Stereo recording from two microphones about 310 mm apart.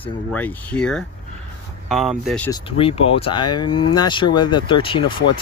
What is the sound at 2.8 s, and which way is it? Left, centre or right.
Speech, centre.